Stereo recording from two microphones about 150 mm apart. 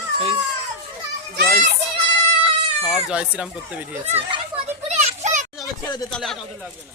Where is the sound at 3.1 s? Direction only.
5° right (ahead or behind).